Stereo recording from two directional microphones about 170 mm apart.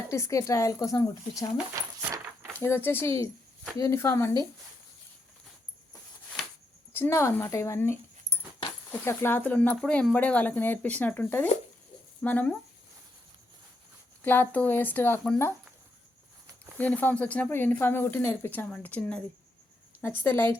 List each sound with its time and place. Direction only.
0.1 s a woman's voice: 20° left (ahead or behind)
2.0 s a sound: 15° right (ahead or behind)
2.5 s speech: 15° left (ahead or behind)
6.9 s speech: 15° left (ahead or behind)
14.3 s speech: 10° left (ahead or behind)
16.7 s speech: 10° left (ahead or behind)
20.2 s speech: 15° left (ahead or behind)